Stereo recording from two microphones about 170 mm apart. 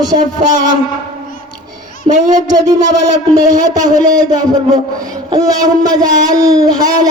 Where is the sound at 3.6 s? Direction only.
20° right (ahead or behind).